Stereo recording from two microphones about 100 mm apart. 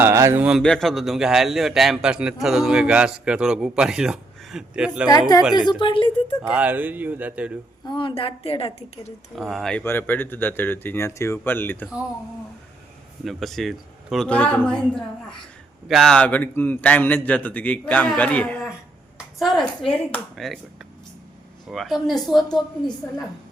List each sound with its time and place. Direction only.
0.0 s a sound: 30° right (ahead or behind)
0.3 s speech: 10° right (ahead or behind)
0.6 s a man's voice: 5° left (ahead or behind)
5.5 s a woman's voice: 50° left (ahead or behind)
6.5 s speech: 15° right (ahead or behind)
7.9 s a woman's voice: 60° left (ahead or behind); by 9.1 s 75° left (ahead or behind)
9.3 s a man's voice: centre (ahead or behind)
9.8 s speech: 20° left (ahead or behind)
13.2 s speech: centre (ahead or behind)
14.3 s a man's voice: 15° left (ahead or behind)
16.1 s a man's voice: 15° left (ahead or behind)
19.8 s a woman's voice: 65° left (ahead or behind)
20.3 s a man's voice: centre (ahead or behind)
21.7 s a man's voice: centre (ahead or behind)